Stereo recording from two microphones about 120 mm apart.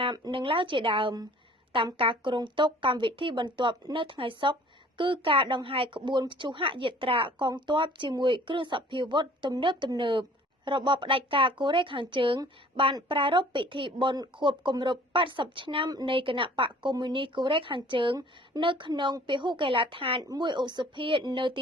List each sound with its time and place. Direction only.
0.0 s speech: 45° right (ahead or behind)
15.9 s speech: 35° right (ahead or behind)
16.1 s speech: 45° right (ahead or behind)
20.2 s speech: 35° right (ahead or behind)